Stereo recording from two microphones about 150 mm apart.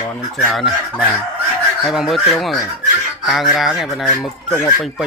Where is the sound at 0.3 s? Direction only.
Centre (ahead or behind).